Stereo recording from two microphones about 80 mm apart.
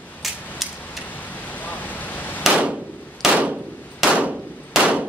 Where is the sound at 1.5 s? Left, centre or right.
Left.